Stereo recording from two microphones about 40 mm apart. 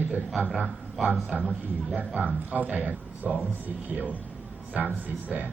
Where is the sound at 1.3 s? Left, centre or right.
Right.